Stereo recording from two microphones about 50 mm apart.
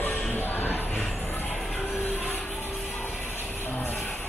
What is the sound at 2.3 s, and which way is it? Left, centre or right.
Vehicle, left.